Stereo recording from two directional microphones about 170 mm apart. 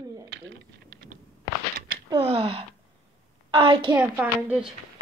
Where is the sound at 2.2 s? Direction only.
35° right (ahead or behind).